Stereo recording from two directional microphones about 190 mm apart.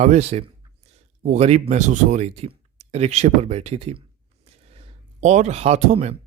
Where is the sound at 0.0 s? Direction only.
35° right (ahead or behind).